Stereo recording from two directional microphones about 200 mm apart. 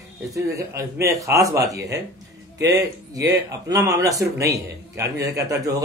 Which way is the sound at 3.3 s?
15° right (ahead or behind).